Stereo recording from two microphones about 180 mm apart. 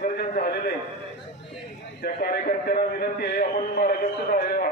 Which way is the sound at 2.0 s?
55° left (ahead or behind).